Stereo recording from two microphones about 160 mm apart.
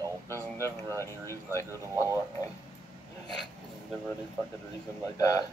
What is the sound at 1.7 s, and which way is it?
Speech, 15° right (ahead or behind).